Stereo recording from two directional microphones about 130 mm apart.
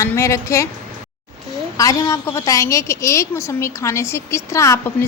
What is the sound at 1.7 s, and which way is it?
A woman's voice, 25° left (ahead or behind).